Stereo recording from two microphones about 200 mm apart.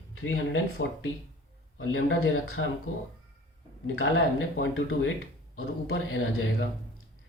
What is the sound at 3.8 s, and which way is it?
Speech, 90° left.